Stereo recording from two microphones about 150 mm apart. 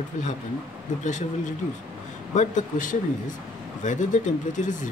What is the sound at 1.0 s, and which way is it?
Speech, 55° left (ahead or behind).